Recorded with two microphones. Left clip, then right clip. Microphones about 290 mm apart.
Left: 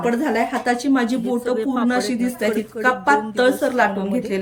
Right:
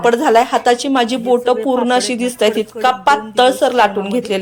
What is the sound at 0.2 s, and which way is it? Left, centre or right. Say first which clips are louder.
A woman's voice: right 9 dB; centre.